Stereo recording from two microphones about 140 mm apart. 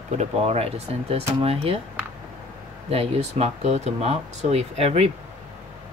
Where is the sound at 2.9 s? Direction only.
45° right (ahead or behind).